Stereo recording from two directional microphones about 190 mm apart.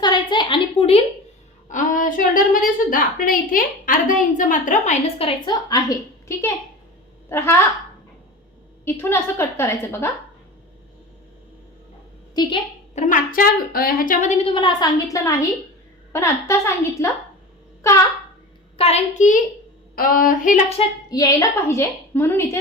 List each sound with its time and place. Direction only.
0.0 s a sound: 25° left (ahead or behind)
1.6 s a woman's voice: 40° left (ahead or behind); by 7.5 s 10° left (ahead or behind)
8.8 s a woman's voice: 10° left (ahead or behind)
12.3 s a woman's voice: 25° left (ahead or behind)
12.9 s a woman's voice: 40° left (ahead or behind); by 17.1 s 15° left (ahead or behind)
18.8 s a woman's voice: 35° left (ahead or behind)
21.1 s a woman's voice: 20° left (ahead or behind)